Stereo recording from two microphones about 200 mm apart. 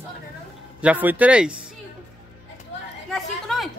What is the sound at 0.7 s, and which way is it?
Speech, 5° right (ahead or behind).